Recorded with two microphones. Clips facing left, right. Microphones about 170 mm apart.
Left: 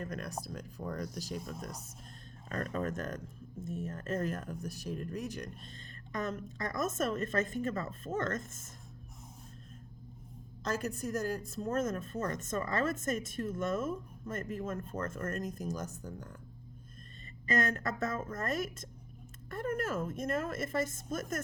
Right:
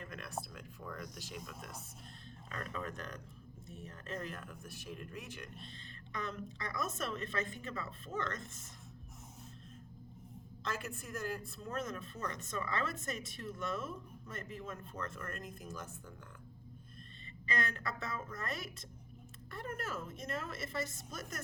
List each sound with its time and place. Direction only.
0.0 s speech: 40° left (ahead or behind)
10.6 s speech: 40° left (ahead or behind)
17.4 s speech: 45° left (ahead or behind)